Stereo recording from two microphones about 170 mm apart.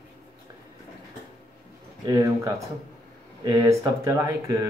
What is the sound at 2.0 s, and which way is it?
Speech, 20° right (ahead or behind).